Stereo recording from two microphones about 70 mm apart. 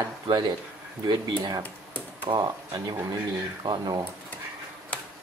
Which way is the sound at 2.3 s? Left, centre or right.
Right.